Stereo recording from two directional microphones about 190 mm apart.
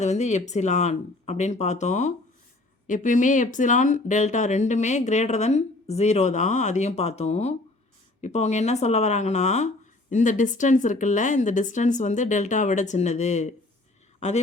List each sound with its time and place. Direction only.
0.0 s speech: 35° left (ahead or behind)